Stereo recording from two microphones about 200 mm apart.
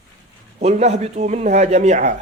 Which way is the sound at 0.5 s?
35° right (ahead or behind).